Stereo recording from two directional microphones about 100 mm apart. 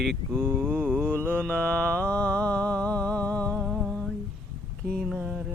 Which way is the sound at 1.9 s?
10° left (ahead or behind).